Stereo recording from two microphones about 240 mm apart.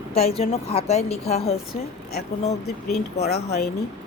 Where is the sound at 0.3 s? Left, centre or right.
Left.